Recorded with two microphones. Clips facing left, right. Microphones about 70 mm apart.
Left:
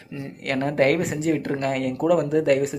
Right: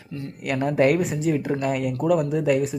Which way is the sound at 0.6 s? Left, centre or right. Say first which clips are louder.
Right 1 dB; left.